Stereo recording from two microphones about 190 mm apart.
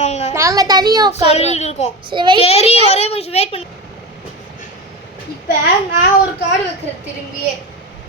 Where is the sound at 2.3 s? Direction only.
30° left (ahead or behind).